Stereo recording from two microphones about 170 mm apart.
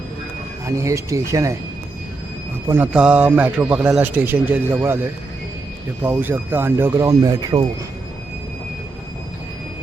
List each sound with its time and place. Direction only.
0.6 s a man's voice: 20° right (ahead or behind)
2.6 s a man's voice: 10° right (ahead or behind)
6.0 s a man's voice: 10° right (ahead or behind)